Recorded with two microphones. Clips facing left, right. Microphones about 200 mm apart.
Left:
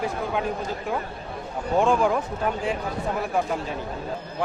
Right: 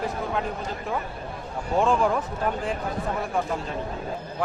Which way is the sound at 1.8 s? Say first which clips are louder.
Left 1 dB; centre (ahead or behind).